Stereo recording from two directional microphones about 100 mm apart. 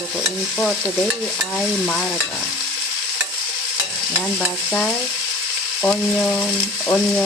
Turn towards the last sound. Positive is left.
turn(degrees=5)  # may be behind; listen again after turning